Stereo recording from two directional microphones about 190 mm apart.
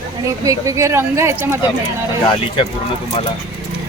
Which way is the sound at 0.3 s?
15° right (ahead or behind).